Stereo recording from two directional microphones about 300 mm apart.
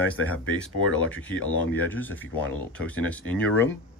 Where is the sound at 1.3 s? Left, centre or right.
Left.